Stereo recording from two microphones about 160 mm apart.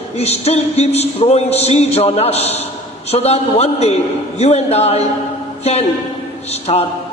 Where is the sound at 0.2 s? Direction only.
40° left (ahead or behind).